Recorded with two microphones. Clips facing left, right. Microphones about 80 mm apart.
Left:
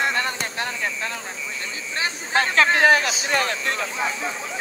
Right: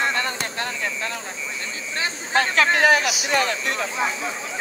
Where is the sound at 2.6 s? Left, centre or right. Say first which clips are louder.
Left 1 dB; left.